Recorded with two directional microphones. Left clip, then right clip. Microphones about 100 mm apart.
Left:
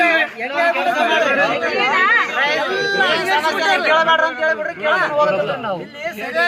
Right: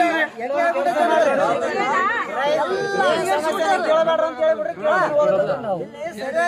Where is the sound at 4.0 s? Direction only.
55° right (ahead or behind).